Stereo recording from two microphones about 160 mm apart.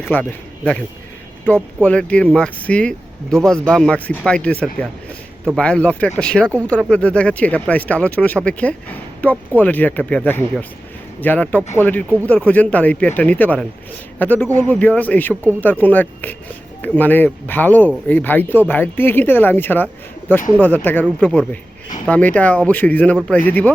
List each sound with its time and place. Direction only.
0.0 s speech: 10° left (ahead or behind)